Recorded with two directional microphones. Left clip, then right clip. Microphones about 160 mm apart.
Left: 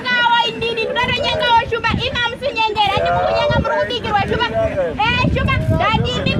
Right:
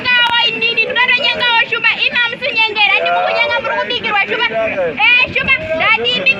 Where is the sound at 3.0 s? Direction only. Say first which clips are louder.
Right 2 dB; 15° right (ahead or behind).